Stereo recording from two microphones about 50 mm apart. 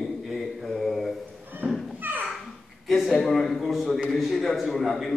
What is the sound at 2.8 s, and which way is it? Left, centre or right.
A man's voice, centre.